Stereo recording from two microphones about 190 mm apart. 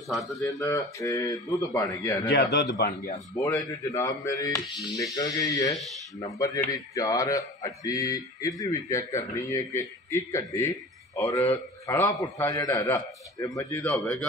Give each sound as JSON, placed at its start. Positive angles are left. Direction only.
{"t": 0.1, "sound": "speech", "side_deg": 0}
{"t": 0.4, "sound": "a man's voice", "side_deg": 15}
{"t": 2.2, "sound": "a man's voice", "side_deg": 60}
{"t": 3.3, "sound": "a man's voice", "side_deg": 20}
{"t": 13.8, "sound": "speech", "side_deg": 5}